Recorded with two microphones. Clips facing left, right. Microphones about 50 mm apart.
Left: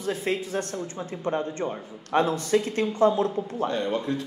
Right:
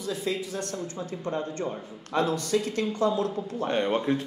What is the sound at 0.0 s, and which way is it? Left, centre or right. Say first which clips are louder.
Speech: left 3 dB; left.